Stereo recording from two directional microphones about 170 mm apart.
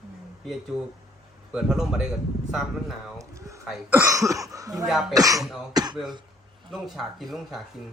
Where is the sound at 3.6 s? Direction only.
5° right (ahead or behind).